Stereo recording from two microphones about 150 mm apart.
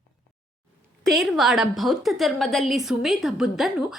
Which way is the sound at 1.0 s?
Centre (ahead or behind).